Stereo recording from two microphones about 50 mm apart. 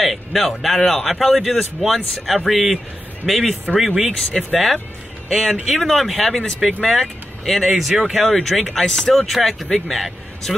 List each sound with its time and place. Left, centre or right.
0.0 s a man's voice: centre
4.3 s speech: centre
5.3 s a man's voice: centre
8.8 s speech: centre
9.1 s a man's voice: centre